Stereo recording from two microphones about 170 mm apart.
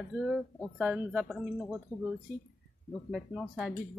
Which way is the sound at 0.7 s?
10° right (ahead or behind).